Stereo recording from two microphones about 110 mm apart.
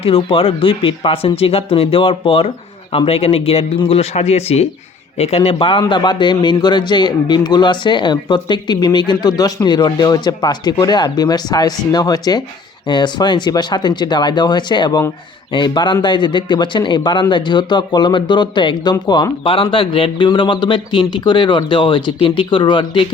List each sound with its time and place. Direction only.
0.0 s a man's voice: 55° left (ahead or behind)